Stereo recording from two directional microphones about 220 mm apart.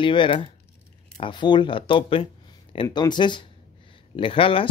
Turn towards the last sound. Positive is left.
turn(degrees=25)  # may be behind; listen again after turning